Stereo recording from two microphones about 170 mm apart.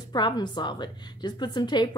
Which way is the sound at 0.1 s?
25° left (ahead or behind).